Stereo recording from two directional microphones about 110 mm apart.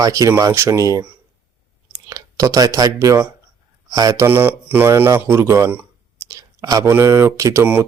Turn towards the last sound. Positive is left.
turn(degrees=-25)  # may be behind; listen again after turning